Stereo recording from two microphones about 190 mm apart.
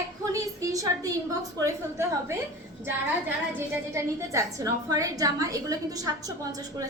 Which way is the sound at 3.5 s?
15° right (ahead or behind).